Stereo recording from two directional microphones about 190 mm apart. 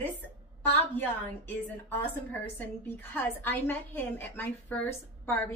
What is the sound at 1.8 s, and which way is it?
A woman's voice, 10° left (ahead or behind).